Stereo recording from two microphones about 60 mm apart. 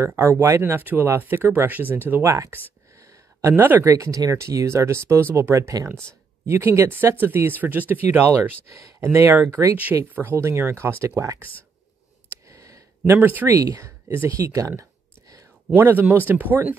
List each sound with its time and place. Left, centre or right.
0.0 s speech: right
2.2 s speech: right
3.0 s a sound: right
3.5 s speech: right
3.8 s speech: right
8.7 s speech: right
9.1 s speech: right
10.3 s speech: right
12.3 s a sound: right
13.1 s speech: right
13.6 s speech: right
14.8 s a sound: right
15.7 s speech: right